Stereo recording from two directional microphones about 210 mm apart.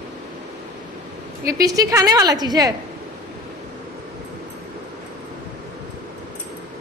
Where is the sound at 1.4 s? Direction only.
45° right (ahead or behind).